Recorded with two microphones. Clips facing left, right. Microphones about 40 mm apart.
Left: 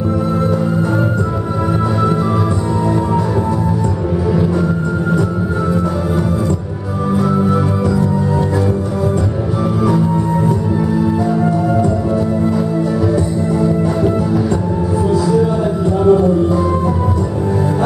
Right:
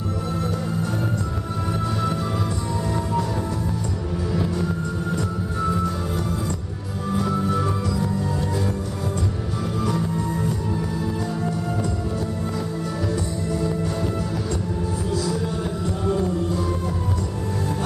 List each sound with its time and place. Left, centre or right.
7.2 s music: left
13.6 s music: left
16.1 s music: centre